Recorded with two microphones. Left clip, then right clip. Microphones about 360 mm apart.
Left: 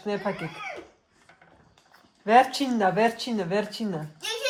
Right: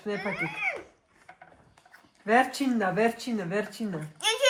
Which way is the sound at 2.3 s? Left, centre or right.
Left.